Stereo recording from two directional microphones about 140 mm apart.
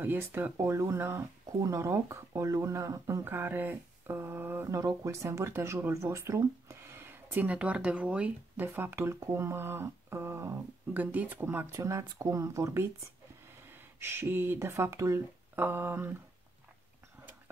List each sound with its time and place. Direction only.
0.0 s speech: 15° right (ahead or behind)
13.9 s speech: 15° right (ahead or behind)